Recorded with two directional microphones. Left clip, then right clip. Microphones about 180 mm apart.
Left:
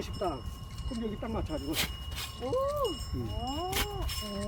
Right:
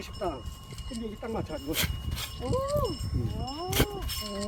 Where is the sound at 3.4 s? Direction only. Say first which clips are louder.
Left 2 dB; 65° left (ahead or behind).